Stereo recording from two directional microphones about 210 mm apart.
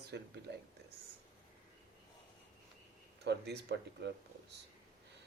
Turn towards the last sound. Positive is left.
turn(degrees=-55)  # may be behind; listen again after turning